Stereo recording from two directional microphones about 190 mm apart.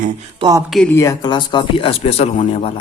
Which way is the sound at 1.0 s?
20° left (ahead or behind).